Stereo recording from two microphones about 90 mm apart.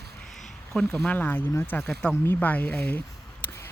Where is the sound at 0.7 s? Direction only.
5° left (ahead or behind).